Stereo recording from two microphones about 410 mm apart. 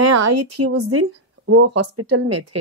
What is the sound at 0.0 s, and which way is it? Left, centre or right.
A woman's voice, right.